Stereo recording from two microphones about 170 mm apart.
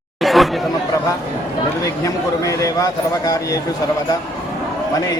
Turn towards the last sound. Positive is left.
turn(degrees=20)  # may be behind; listen again after turning